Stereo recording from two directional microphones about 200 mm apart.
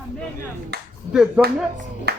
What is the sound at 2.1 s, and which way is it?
Music, 55° right (ahead or behind).